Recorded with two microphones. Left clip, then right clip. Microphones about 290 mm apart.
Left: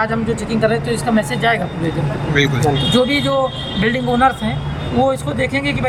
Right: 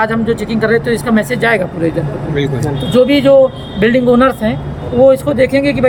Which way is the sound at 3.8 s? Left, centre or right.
Centre.